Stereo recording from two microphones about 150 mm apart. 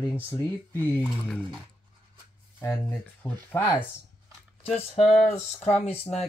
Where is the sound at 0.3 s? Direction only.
15° left (ahead or behind).